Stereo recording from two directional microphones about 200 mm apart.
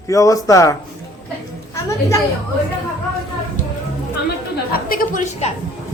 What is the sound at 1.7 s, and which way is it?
Chatter, 15° left (ahead or behind).